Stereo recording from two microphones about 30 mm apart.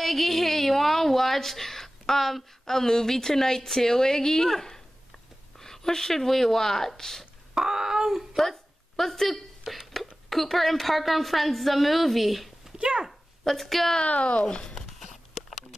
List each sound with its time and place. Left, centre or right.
0.0 s a woman's voice: centre
5.6 s a sound: centre
6.2 s a woman's voice: centre
7.5 s a sound: centre
8.4 s speech: centre
9.6 s a woman's voice: centre
12.7 s speech: right
13.4 s a woman's voice: centre
14.0 s speech: left
14.8 s a sound: centre